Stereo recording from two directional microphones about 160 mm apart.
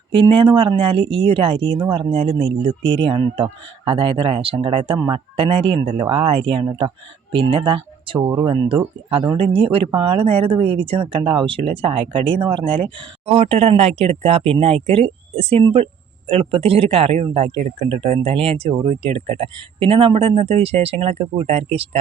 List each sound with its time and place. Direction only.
0.1 s speech: 30° right (ahead or behind)